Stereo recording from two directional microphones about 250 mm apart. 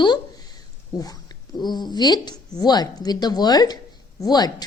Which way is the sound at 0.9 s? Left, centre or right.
Centre.